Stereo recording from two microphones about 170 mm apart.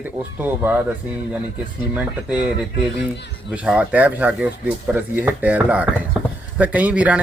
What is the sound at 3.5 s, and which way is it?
Speech, 5° right (ahead or behind).